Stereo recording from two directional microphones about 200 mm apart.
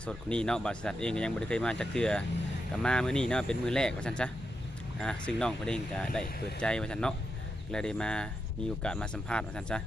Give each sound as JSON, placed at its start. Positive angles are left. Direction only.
{"t": 0.0, "sound": "speech", "side_deg": 5}